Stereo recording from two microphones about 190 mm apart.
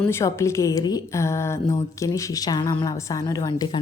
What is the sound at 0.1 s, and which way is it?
A woman's voice, 15° left (ahead or behind).